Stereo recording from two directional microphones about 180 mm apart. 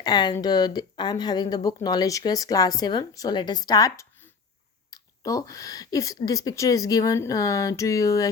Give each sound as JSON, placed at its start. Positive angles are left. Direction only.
{"t": 0.0, "sound": "speech", "side_deg": 25}